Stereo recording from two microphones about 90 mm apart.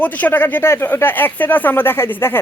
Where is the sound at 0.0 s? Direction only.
20° left (ahead or behind).